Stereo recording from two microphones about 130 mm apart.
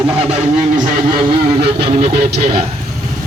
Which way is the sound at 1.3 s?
45° right (ahead or behind).